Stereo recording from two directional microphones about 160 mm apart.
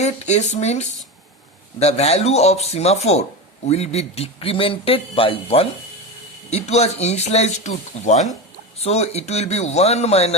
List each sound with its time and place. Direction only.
0.0 s speech: 45° left (ahead or behind)